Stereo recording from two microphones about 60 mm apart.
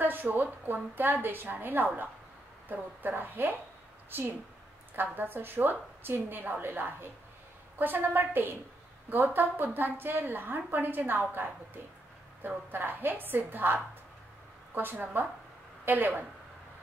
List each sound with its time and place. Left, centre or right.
0.0 s a woman's voice: right
4.9 s a woman's voice: right